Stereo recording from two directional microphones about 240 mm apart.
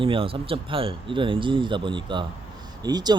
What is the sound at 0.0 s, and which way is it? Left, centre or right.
A man's voice, right.